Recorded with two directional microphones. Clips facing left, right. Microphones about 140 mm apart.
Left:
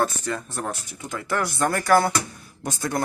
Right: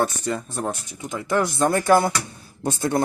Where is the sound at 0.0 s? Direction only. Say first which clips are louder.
Right 1 dB; 20° right (ahead or behind).